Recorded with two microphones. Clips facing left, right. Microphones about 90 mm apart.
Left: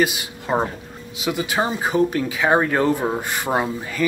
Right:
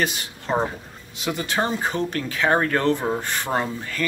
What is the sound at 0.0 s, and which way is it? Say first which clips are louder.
Speech: left 4 dB; 5° left (ahead or behind).